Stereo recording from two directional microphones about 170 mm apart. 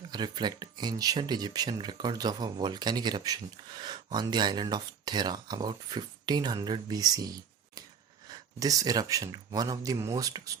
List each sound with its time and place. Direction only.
0.1 s speech: 25° right (ahead or behind)
7.8 s a sound: 20° right (ahead or behind)
8.3 s speech: 20° right (ahead or behind)